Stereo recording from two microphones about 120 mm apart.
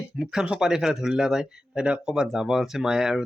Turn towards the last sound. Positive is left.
turn(degrees=-5)  # may be behind; listen again after turning